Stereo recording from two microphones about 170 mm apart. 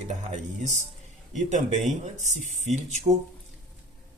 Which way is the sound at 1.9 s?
45° right (ahead or behind).